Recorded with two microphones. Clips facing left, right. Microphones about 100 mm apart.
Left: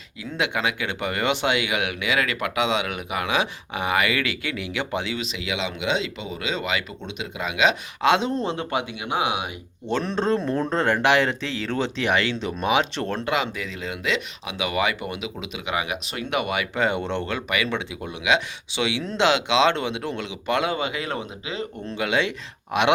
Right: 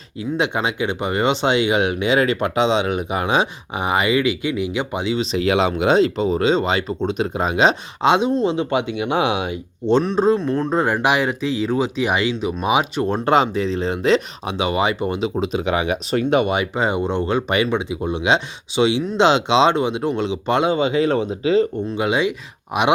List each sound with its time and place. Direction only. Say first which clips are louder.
0.2 s speech: right 5 dB; 25° right (ahead or behind)
5.2 s speech: right 11 dB; 40° right (ahead or behind)
8.0 s speech: right 4 dB; 20° right (ahead or behind)
10.0 s speech: right 6 dB; 5° right (ahead or behind)
13.2 s speech: right 9 dB; 35° right (ahead or behind); by 17.3 s 15° right (ahead or behind)
17.3 s speech: right 9 dB; 30° right (ahead or behind)
17.7 s speech: right 7 dB; 20° right (ahead or behind); by 21.7 s 35° right (ahead or behind)
21.9 s speech: right 3 dB; 20° right (ahead or behind)